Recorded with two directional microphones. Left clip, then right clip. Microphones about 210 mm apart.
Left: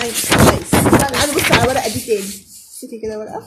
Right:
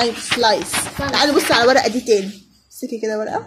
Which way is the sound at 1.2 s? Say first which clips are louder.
Right 1 dB; 35° right (ahead or behind).